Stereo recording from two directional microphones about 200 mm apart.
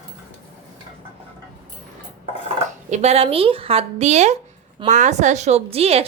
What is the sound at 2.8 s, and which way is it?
A woman's voice, 35° right (ahead or behind).